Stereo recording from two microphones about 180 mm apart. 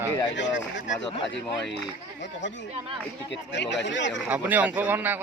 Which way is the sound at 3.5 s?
80° left.